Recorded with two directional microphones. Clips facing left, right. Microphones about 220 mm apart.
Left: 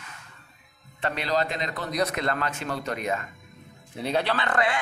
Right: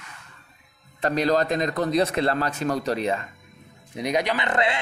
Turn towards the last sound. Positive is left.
turn(degrees=-25)  # may be behind; listen again after turning